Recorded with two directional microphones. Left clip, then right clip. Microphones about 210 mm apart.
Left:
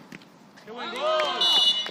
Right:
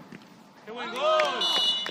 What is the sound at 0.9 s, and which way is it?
Run, 10° right (ahead or behind).